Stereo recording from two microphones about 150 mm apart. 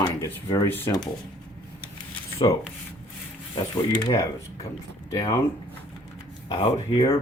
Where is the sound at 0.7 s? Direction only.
15° left (ahead or behind).